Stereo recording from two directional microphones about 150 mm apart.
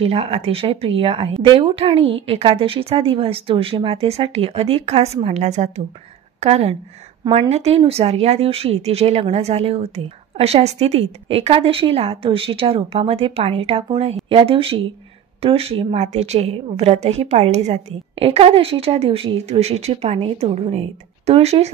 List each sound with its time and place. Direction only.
0.0 s a woman's voice: 40° right (ahead or behind)